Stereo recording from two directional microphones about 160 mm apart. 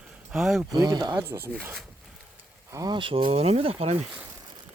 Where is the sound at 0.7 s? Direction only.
25° right (ahead or behind).